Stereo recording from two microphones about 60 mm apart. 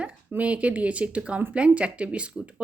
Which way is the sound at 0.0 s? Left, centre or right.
Right.